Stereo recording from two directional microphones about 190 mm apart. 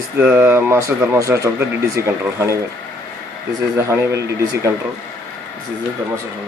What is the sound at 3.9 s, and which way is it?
Speech, 15° right (ahead or behind).